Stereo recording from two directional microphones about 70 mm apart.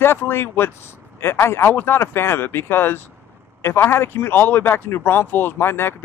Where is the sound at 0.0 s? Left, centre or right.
Left.